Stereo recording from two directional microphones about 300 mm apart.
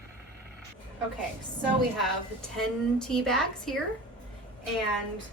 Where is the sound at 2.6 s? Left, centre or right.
Centre.